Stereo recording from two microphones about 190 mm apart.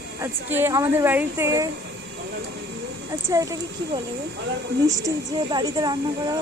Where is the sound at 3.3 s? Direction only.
15° right (ahead or behind).